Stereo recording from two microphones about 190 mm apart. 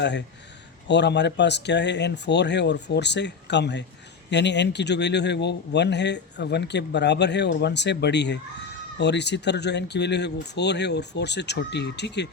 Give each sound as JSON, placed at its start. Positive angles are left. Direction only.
{"t": 0.0, "sound": "a man's voice", "side_deg": 65}